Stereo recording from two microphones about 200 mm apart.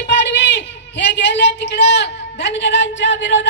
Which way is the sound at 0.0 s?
60° left (ahead or behind).